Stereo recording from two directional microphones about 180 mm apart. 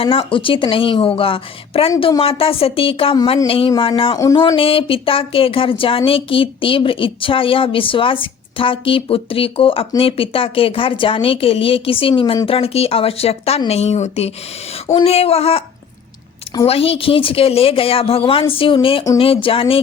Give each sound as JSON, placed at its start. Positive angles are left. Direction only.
{"t": 0.0, "sound": "a woman's voice", "side_deg": 30}
{"t": 4.2, "sound": "a woman's voice", "side_deg": 20}
{"t": 16.6, "sound": "a woman's voice", "side_deg": 35}